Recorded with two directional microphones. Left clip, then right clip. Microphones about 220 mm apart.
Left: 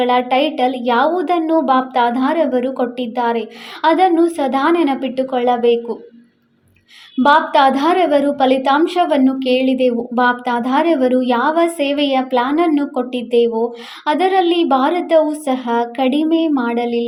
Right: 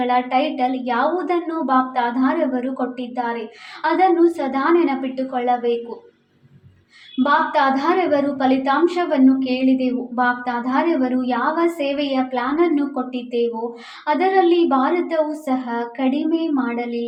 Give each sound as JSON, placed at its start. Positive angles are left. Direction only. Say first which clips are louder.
{"t": 0.0, "sound": "a woman's voice", "louder": "left 4 dB", "side_deg": 45}
{"t": 7.2, "sound": "a woman's voice", "louder": "left 5 dB", "side_deg": 45}